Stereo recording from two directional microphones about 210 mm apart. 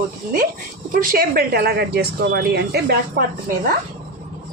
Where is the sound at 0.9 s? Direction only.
40° right (ahead or behind).